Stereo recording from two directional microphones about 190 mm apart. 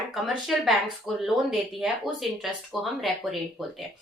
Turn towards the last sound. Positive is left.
turn(degrees=0)  # may be behind; listen again after turning